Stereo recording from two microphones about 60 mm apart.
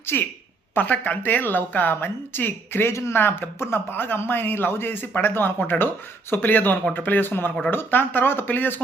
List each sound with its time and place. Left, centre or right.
0.1 s a woman's voice: left